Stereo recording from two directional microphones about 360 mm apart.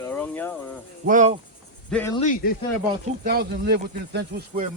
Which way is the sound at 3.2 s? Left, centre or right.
Right.